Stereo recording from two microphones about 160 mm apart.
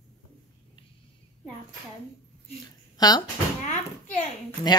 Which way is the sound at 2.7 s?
25° left (ahead or behind).